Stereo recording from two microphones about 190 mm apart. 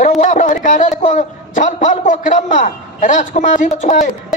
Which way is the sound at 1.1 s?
40° left (ahead or behind).